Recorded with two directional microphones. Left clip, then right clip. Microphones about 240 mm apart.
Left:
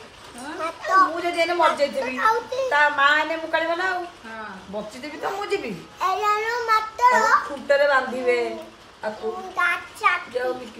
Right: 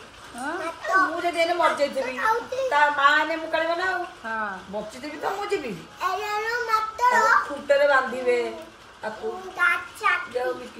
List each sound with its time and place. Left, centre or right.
0.8 s a child's voice: centre
5.0 s a child's voice: centre
9.6 s a child's voice: centre